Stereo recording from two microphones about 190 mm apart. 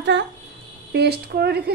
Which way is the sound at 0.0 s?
65° right (ahead or behind).